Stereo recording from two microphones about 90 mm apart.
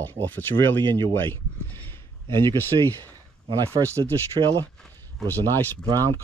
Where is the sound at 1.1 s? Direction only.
25° left (ahead or behind).